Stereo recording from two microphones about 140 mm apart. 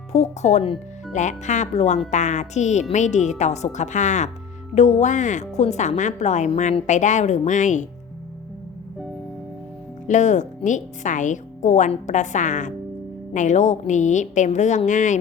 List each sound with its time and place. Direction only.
0.1 s speech: 55° left (ahead or behind)
1.1 s a woman's voice: 60° left (ahead or behind)
10.1 s a woman's voice: 60° left (ahead or behind)